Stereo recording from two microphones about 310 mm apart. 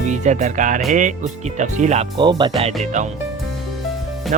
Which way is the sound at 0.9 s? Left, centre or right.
Right.